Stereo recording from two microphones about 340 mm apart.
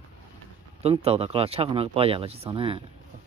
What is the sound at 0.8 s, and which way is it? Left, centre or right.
Speech, centre.